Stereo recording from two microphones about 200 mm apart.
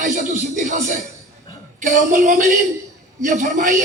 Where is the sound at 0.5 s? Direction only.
35° right (ahead or behind).